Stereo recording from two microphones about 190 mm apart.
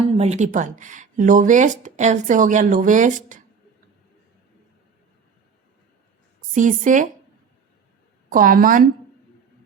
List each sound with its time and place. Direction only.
0.2 s speech: 35° right (ahead or behind)
6.5 s speech: 45° right (ahead or behind)
8.3 s speech: 50° right (ahead or behind)